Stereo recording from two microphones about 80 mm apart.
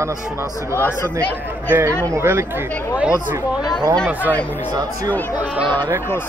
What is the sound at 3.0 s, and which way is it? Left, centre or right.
Speech, centre.